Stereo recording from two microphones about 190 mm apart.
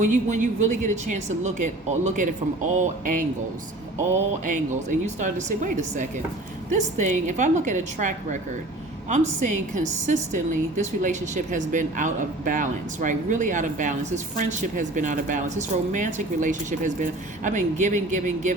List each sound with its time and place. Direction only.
0.0 s a woman's voice: 40° right (ahead or behind)
4.4 s a woman's voice: 40° right (ahead or behind)